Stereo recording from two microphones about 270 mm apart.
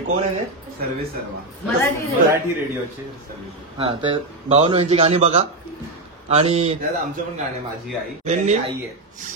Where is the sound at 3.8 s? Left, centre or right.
Centre.